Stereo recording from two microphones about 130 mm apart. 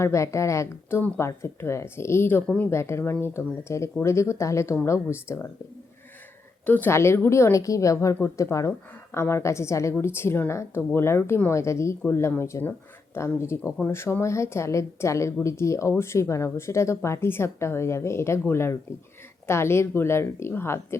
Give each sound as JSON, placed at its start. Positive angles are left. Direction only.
{"t": 0.0, "sound": "speech", "side_deg": 20}
{"t": 6.7, "sound": "speech", "side_deg": 15}